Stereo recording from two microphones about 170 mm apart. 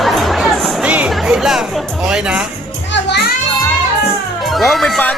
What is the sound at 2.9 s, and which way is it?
Children playing, 80° left.